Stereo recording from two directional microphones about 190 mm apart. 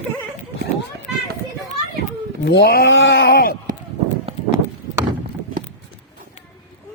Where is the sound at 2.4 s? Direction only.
60° left (ahead or behind).